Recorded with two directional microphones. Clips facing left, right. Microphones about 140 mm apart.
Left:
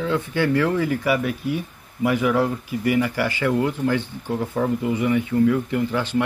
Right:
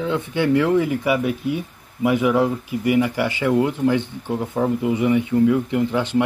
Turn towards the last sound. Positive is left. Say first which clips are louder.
# right 3 dB
turn(degrees=-20)  # may be behind; listen again after turning